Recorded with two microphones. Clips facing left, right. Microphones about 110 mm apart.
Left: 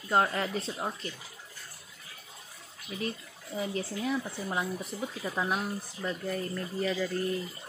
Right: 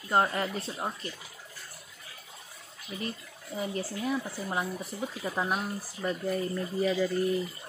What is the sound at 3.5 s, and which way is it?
Speech, 5° right (ahead or behind).